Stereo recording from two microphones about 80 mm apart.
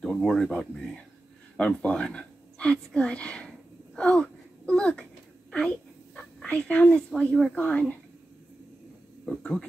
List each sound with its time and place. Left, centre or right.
0.0 s speech: centre
5.5 s a sound: centre
7.5 s a woman's voice: centre
9.2 s speech: centre